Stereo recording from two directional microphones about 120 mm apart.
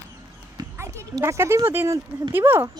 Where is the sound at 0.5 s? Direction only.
25° right (ahead or behind).